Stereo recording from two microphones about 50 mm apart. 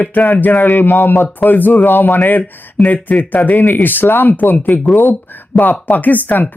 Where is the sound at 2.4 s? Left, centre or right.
Left.